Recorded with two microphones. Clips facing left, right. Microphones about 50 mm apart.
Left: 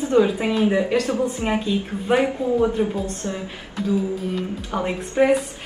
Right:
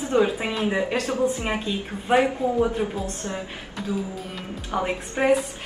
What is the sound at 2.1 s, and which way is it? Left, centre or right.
A woman's voice, centre.